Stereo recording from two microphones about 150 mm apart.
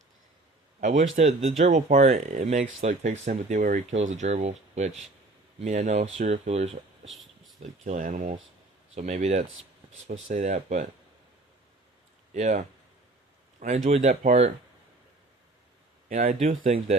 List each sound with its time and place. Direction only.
0.8 s speech: 55° right (ahead or behind)
7.1 s a sound: centre (ahead or behind)
7.6 s speech: 55° right (ahead or behind)
12.3 s speech: 55° right (ahead or behind)
16.0 s speech: 65° right (ahead or behind)